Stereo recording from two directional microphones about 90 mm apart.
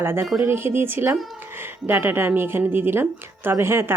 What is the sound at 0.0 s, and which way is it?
A woman's voice, 25° right (ahead or behind).